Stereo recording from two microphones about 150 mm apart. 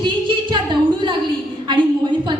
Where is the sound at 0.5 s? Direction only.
30° right (ahead or behind).